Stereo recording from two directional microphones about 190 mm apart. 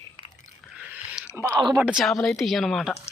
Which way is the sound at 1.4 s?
20° right (ahead or behind).